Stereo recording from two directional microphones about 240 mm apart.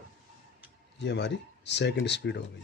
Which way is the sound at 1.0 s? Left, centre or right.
Left.